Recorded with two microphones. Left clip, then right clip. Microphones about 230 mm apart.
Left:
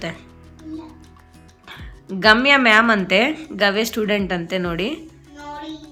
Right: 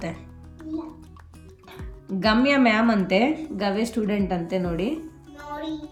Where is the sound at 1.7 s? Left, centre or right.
Centre.